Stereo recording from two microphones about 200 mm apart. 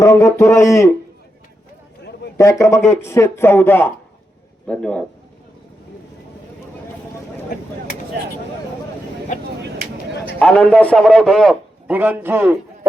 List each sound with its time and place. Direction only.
0.0 s a man's voice: 15° left (ahead or behind)
2.4 s a man's voice: 15° left (ahead or behind)
9.3 s speech: 40° left (ahead or behind)
10.4 s a man's voice: 5° left (ahead or behind)
11.9 s a man's voice: 10° right (ahead or behind)